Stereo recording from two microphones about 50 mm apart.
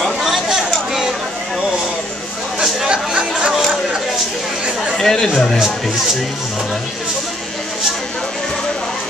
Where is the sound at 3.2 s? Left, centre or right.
Centre.